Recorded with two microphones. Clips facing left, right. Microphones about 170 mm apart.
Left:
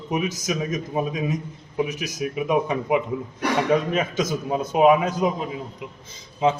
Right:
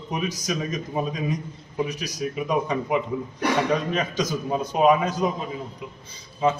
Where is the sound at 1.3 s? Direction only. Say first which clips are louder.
Left 2 dB; 10° left (ahead or behind).